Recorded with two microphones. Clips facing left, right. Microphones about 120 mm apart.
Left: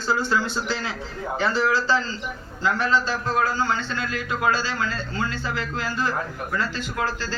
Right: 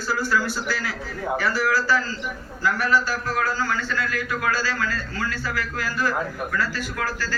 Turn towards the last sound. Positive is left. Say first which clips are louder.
# left 1 dB
turn(degrees=25)  # may be behind; listen again after turning